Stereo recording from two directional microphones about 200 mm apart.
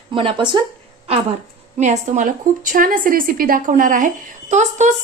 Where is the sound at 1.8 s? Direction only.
35° right (ahead or behind).